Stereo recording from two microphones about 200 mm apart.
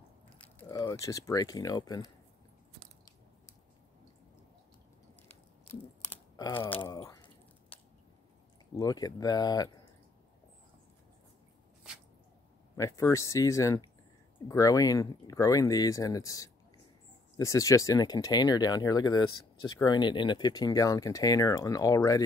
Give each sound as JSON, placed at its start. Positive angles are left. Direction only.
{"t": 0.6, "sound": "speech", "side_deg": 15}
{"t": 6.0, "sound": "a sound", "side_deg": 20}
{"t": 8.7, "sound": "speech", "side_deg": 20}
{"t": 12.7, "sound": "speech", "side_deg": 15}